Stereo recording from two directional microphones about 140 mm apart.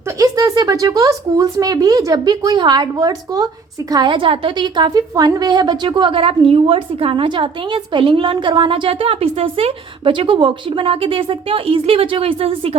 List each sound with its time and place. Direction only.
0.2 s speech: 25° right (ahead or behind); by 12.7 s 40° right (ahead or behind)